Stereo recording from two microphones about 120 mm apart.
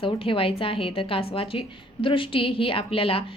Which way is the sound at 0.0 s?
50° left (ahead or behind).